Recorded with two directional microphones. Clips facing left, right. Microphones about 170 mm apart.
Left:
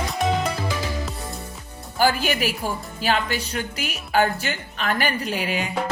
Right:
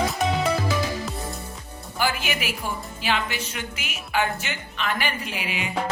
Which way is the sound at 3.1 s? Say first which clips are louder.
Left 3 dB; 40° left (ahead or behind).